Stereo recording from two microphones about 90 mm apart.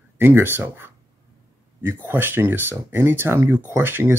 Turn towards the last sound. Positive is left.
turn(degrees=-25)  # may be behind; listen again after turning